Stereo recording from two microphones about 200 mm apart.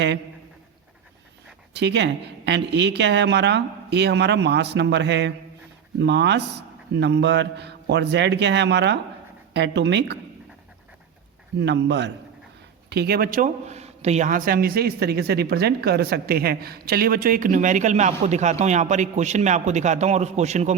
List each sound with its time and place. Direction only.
1.7 s speech: 60° right (ahead or behind)
11.6 s speech: 60° right (ahead or behind); by 20.7 s 35° right (ahead or behind)